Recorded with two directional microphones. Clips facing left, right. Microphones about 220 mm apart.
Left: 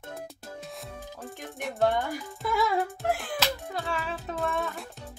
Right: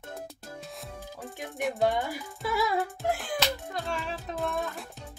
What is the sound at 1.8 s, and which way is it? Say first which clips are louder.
Music: left 2 dB; 15° right (ahead or behind).